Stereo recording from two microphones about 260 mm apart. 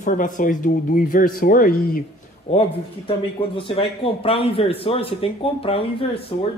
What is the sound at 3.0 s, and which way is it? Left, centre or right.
A man's voice, left.